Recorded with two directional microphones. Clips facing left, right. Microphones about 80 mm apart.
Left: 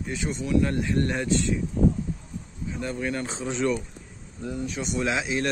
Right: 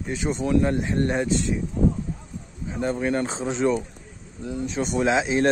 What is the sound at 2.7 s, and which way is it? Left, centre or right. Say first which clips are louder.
Speech: right 5 dB; right.